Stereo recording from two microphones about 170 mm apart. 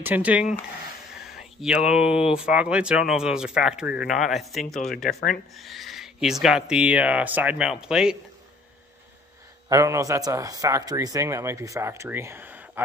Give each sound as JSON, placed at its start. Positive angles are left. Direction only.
{"t": 0.0, "sound": "speech", "side_deg": -10}
{"t": 9.7, "sound": "speech", "side_deg": -20}